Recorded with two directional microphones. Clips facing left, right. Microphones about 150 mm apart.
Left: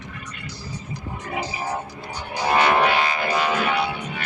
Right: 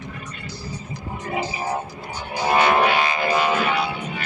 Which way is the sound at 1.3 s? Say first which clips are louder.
Right 2 dB; 25° right (ahead or behind).